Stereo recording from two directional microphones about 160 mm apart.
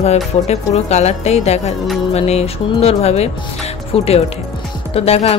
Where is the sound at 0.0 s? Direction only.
45° left (ahead or behind).